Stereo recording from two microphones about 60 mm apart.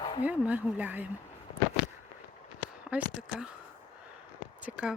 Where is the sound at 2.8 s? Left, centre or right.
Centre.